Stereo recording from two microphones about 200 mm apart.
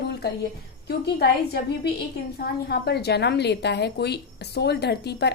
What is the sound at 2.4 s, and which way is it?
A woman's voice, 55° left (ahead or behind).